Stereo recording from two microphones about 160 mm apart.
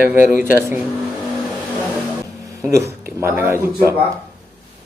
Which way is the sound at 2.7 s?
15° right (ahead or behind).